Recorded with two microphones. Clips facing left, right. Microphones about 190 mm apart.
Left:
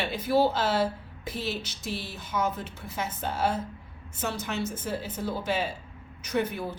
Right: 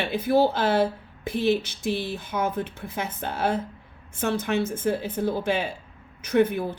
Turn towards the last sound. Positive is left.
turn(degrees=-55)  # may be behind; listen again after turning